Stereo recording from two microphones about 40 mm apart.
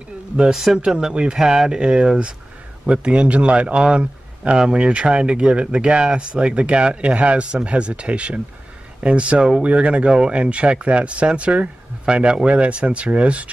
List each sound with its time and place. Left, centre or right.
0.4 s a man's voice: centre; by 13.5 s right